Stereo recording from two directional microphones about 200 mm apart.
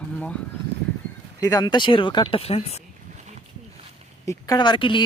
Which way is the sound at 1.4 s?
20° left (ahead or behind).